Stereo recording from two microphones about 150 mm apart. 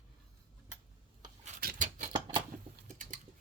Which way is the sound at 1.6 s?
70° right (ahead or behind).